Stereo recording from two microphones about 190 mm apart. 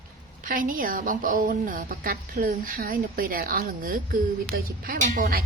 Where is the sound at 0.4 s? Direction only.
45° right (ahead or behind).